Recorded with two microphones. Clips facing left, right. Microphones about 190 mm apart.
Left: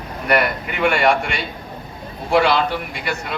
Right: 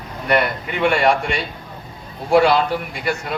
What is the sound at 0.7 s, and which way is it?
A man's voice, 30° right (ahead or behind).